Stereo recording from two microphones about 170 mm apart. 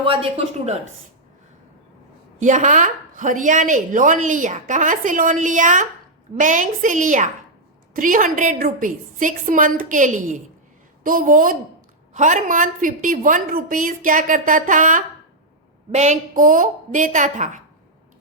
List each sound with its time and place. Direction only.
0.0 s speech: 35° right (ahead or behind)
2.4 s a woman's voice: 45° right (ahead or behind)